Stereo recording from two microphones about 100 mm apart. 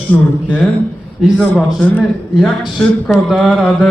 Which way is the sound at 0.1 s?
15° left (ahead or behind).